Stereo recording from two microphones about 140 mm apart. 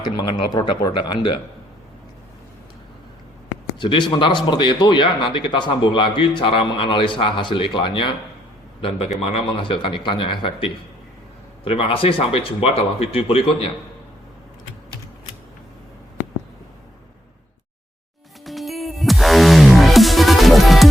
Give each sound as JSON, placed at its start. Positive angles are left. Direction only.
{"t": 0.0, "sound": "speech", "side_deg": 30}
{"t": 3.8, "sound": "a man's voice", "side_deg": 35}
{"t": 18.4, "sound": "music", "side_deg": 0}